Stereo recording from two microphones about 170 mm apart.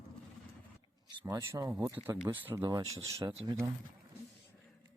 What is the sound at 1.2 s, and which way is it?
Speech, 20° right (ahead or behind).